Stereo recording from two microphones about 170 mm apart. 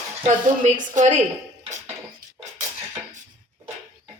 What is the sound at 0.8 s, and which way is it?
Speech, 45° right (ahead or behind).